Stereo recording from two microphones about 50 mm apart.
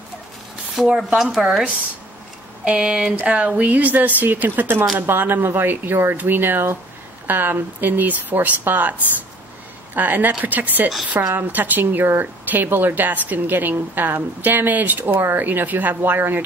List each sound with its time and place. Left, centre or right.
0.9 s speech: centre
2.6 s a woman's voice: right
9.9 s a woman's voice: right
15.1 s a woman's voice: right
16.0 s speech: right